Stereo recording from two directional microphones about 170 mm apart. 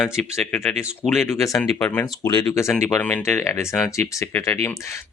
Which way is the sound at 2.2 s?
20° left (ahead or behind).